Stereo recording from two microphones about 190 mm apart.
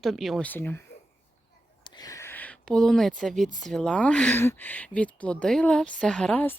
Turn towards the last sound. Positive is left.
turn(degrees=10)  # may be behind; listen again after turning